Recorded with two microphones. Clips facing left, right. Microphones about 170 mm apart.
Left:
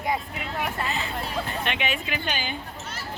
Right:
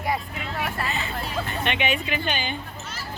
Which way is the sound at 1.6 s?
Centre (ahead or behind).